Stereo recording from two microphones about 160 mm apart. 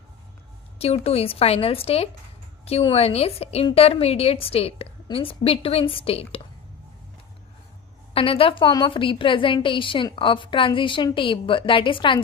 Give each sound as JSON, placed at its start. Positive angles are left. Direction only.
{"t": 0.8, "sound": "a woman's voice", "side_deg": 40}
{"t": 8.1, "sound": "a woman's voice", "side_deg": 35}